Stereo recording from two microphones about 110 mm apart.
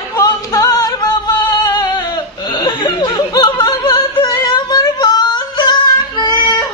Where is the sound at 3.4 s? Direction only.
40° left (ahead or behind).